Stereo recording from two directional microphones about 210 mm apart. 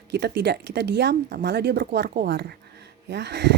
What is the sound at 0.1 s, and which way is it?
Speech, 50° right (ahead or behind).